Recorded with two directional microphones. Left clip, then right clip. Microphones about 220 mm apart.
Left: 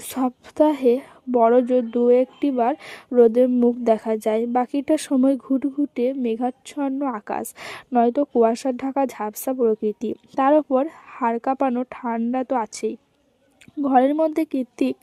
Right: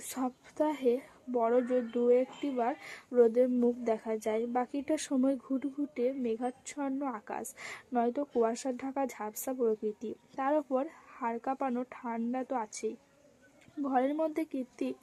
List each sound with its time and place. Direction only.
0.1 s a woman's voice: 40° left (ahead or behind)